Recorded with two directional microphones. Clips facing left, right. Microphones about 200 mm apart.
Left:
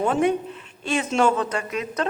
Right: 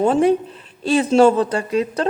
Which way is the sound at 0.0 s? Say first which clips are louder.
Right 5 dB; 30° right (ahead or behind).